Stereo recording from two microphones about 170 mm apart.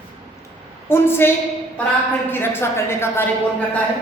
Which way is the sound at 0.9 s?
15° left (ahead or behind).